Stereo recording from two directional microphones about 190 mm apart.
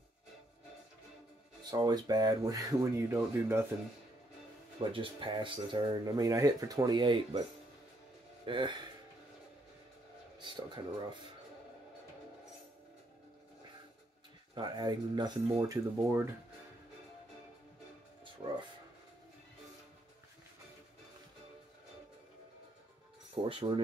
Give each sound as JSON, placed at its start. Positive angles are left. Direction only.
{"t": 1.6, "sound": "speech", "side_deg": -20}
{"t": 4.7, "sound": "speech", "side_deg": -25}
{"t": 8.5, "sound": "speech", "side_deg": -25}
{"t": 10.4, "sound": "a sound", "side_deg": -25}
{"t": 14.5, "sound": "speech", "side_deg": -25}
{"t": 23.3, "sound": "speech", "side_deg": -30}